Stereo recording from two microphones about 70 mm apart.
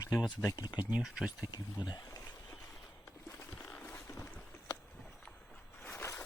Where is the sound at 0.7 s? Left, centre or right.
Right.